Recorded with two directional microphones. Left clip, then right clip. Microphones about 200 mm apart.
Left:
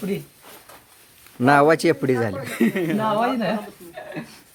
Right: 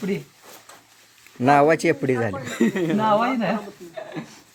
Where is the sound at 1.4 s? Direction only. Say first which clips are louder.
Left 1 dB; 15° left (ahead or behind).